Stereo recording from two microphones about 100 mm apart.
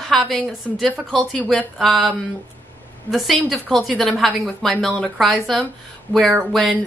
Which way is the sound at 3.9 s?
5° left (ahead or behind).